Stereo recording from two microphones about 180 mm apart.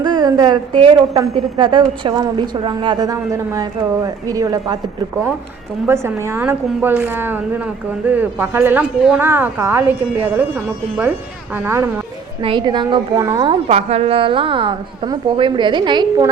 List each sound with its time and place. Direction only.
0.0 s a sound: 25° right (ahead or behind)
1.1 s a woman's voice: 20° right (ahead or behind)
5.9 s a woman's voice: 15° right (ahead or behind)
12.4 s a woman's voice: 25° right (ahead or behind)
13.7 s a woman's voice: 35° right (ahead or behind)